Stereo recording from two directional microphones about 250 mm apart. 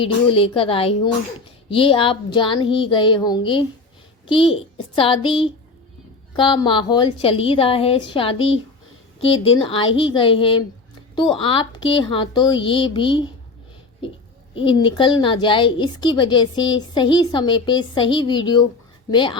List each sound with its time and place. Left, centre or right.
0.0 s a woman's voice: left
14.5 s a woman's voice: centre